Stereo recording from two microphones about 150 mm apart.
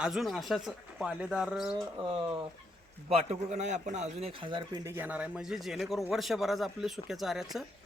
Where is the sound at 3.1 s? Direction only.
45° right (ahead or behind).